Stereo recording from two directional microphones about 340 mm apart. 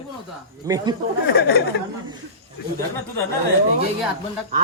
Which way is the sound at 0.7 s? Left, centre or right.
Centre.